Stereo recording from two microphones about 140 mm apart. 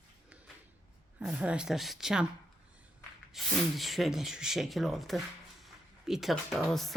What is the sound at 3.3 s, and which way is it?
Speech, centre (ahead or behind).